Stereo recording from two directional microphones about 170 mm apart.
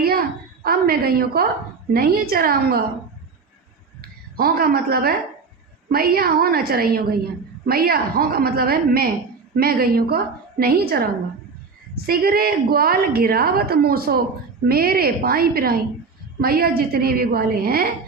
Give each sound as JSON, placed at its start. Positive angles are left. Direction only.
{"t": 0.0, "sound": "a sound", "side_deg": -65}
{"t": 1.9, "sound": "a woman's voice", "side_deg": -60}
{"t": 4.0, "sound": "a woman's voice", "side_deg": -60}